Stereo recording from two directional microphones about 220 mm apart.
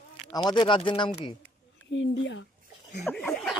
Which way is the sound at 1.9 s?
55° left (ahead or behind).